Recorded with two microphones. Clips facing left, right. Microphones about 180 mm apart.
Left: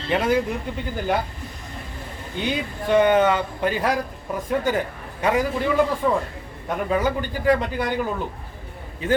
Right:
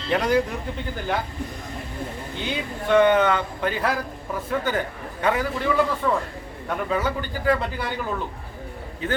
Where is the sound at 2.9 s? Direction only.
10° left (ahead or behind).